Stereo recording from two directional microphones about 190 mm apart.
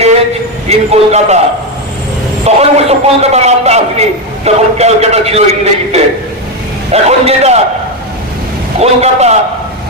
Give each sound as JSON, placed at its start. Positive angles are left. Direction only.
{"t": 0.7, "sound": "a man's voice", "side_deg": -35}
{"t": 2.4, "sound": "a man's voice", "side_deg": -35}
{"t": 8.8, "sound": "a man's voice", "side_deg": -35}